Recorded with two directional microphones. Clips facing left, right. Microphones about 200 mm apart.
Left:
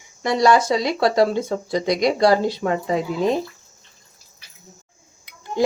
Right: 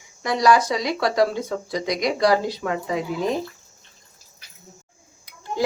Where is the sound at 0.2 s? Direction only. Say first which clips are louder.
Left 2 dB; 25° left (ahead or behind).